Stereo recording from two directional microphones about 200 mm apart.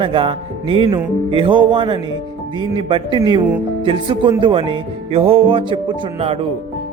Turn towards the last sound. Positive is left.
turn(degrees=-25)  # may be behind; listen again after turning